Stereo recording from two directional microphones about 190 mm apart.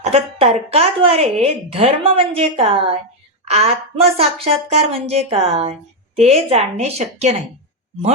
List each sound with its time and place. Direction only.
0.0 s a woman's voice: 30° right (ahead or behind)